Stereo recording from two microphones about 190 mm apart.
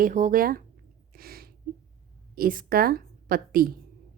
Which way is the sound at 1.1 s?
55° right (ahead or behind).